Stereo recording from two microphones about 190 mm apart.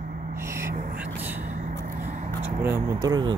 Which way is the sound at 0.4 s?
15° right (ahead or behind).